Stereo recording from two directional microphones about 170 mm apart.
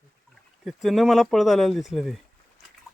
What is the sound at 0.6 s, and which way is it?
Speech, centre (ahead or behind).